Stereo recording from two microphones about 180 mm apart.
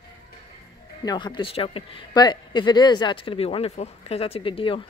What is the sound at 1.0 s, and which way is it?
Speech, 25° left (ahead or behind).